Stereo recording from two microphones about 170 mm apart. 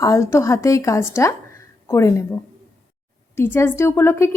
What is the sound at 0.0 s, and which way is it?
A woman's voice, 15° left (ahead or behind).